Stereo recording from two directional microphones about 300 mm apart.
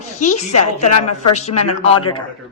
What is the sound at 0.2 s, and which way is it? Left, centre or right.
A woman's voice, left.